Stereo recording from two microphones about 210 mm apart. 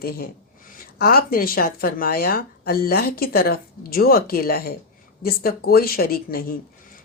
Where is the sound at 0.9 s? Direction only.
45° left (ahead or behind).